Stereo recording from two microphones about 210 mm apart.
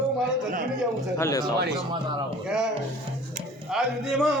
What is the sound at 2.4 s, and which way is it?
Speech, 5° right (ahead or behind).